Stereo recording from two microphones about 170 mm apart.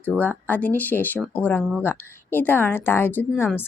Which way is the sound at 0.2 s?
10° left (ahead or behind).